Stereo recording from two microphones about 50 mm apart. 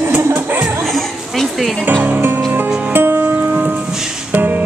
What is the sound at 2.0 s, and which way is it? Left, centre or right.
Music, right.